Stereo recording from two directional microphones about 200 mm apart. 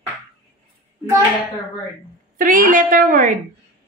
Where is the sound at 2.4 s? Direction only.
45° right (ahead or behind).